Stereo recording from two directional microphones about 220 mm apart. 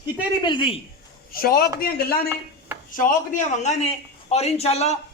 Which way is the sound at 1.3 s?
45° left (ahead or behind).